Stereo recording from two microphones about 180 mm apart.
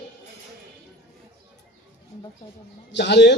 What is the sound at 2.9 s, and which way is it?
Speech, 75° left (ahead or behind).